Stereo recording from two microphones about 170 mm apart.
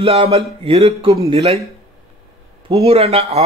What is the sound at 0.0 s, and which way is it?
A man's voice, 35° right (ahead or behind).